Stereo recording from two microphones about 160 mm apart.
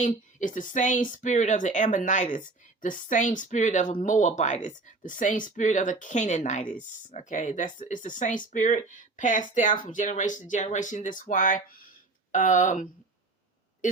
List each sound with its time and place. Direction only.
0.0 s speech: 50° left (ahead or behind)